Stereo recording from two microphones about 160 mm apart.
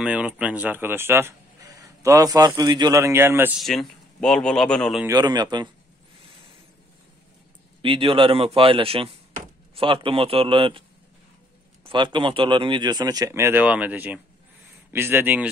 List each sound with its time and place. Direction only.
0.0 s speech: 5° right (ahead or behind)
3.6 s a man's voice: centre (ahead or behind)
5.0 s speech: 25° right (ahead or behind)
7.8 s a man's voice: 35° right (ahead or behind)
11.8 s speech: 30° right (ahead or behind); by 15.4 s 15° right (ahead or behind)